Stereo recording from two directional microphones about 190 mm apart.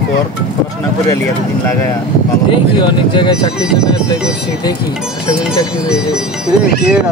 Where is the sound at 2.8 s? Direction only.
25° left (ahead or behind).